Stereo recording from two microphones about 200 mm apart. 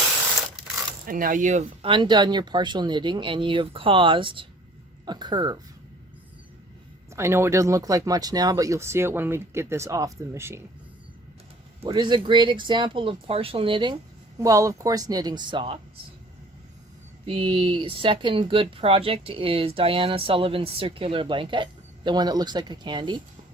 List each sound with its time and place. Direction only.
1.0 s speech: 45° right (ahead or behind)
1.9 s speech: 25° right (ahead or behind)
7.1 s speech: 15° right (ahead or behind)
11.9 s speech: 20° right (ahead or behind)
17.2 s speech: 25° right (ahead or behind)